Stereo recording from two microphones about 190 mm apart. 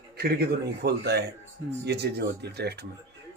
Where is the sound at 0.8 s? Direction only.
60° right (ahead or behind).